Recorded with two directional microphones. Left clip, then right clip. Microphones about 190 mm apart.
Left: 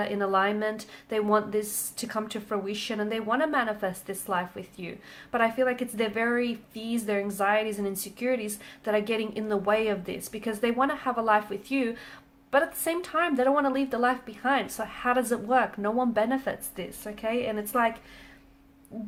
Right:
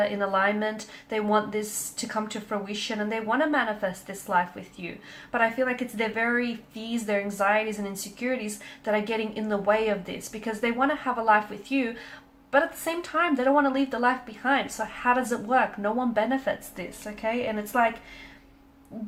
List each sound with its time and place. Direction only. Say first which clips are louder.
0.0 s speech: right 2 dB; 40° left (ahead or behind)